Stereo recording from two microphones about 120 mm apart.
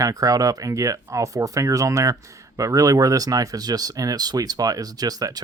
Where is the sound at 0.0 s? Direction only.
30° right (ahead or behind).